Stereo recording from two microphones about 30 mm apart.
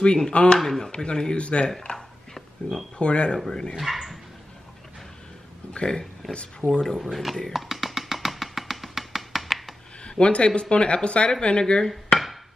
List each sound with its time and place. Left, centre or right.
0.0 s speech: left
0.6 s speech: centre
0.9 s speech: left
1.9 s a sound: centre
3.0 s speech: left
3.4 s dishes: left
3.7 s speech: centre
5.7 s a sound: left
6.2 s speech: centre
6.7 s dishes: centre
7.0 s speech: centre
7.5 s music: centre
10.0 s speech: left
11.6 s dishes: left